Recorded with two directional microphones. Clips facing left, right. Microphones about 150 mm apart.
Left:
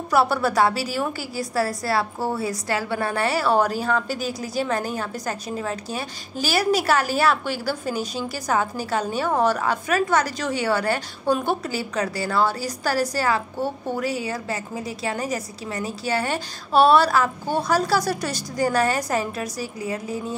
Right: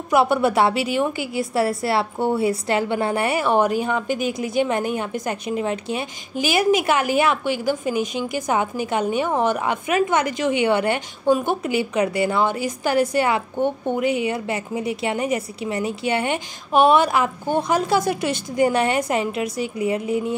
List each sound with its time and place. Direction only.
0.1 s a woman's voice: 20° right (ahead or behind)